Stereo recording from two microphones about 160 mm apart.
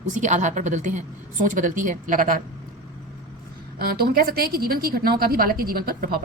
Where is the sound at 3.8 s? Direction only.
70° right (ahead or behind).